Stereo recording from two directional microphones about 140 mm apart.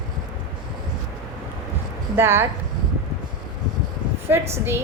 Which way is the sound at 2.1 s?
15° right (ahead or behind).